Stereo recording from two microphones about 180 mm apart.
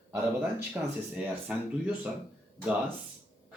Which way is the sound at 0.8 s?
10° right (ahead or behind).